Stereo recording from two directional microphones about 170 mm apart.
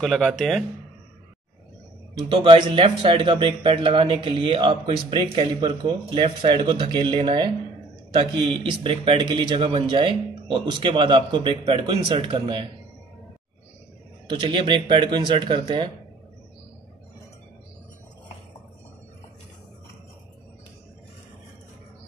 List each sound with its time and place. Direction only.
0.0 s speech: centre (ahead or behind)
2.2 s speech: 30° right (ahead or behind)
14.4 s speech: 30° right (ahead or behind)